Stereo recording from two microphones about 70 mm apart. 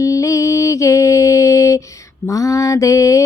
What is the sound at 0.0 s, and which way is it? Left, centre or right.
Mantra, left.